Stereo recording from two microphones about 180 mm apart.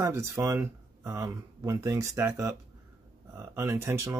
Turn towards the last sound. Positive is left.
turn(degrees=-15)  # may be behind; listen again after turning